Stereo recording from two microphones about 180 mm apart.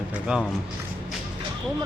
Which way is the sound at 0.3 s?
5° right (ahead or behind).